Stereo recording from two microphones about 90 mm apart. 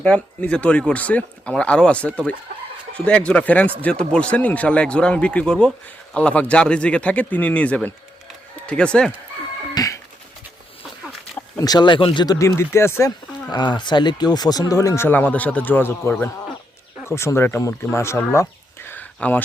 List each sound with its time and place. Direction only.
0.0 s speech: 10° left (ahead or behind)
9.7 s a sound: 40° left (ahead or behind)
11.5 s speech: 45° left (ahead or behind); by 12.2 s 70° left (ahead or behind)
12.4 s speech: 30° left (ahead or behind)
13.1 s speech: 50° left (ahead or behind); by 18.2 s 30° left (ahead or behind)
18.9 s a sound: 20° left (ahead or behind)